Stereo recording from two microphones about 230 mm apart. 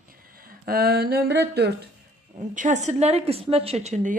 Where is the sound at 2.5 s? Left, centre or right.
Right.